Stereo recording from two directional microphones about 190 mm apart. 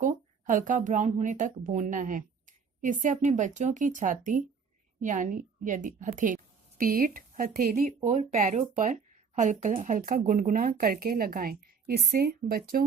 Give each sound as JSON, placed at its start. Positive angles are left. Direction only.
{"t": 0.0, "sound": "a woman's voice", "side_deg": -40}